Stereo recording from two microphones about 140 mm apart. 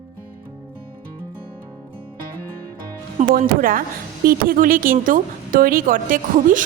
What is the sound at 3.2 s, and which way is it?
Speech, 75° right (ahead or behind).